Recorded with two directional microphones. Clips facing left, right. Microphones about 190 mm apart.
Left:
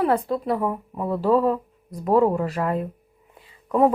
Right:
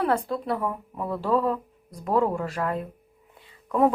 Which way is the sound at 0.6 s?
15° left (ahead or behind).